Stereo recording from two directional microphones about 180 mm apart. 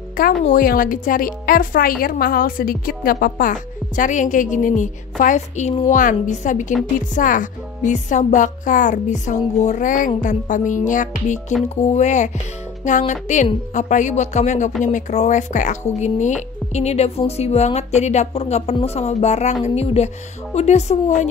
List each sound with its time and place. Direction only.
0.2 s a woman's voice: 50° left (ahead or behind)